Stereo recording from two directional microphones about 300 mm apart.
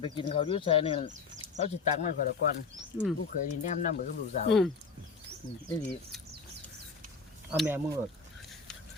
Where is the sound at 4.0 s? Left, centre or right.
Left.